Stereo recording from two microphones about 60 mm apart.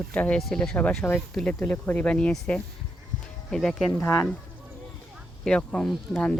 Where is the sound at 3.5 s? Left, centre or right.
Centre.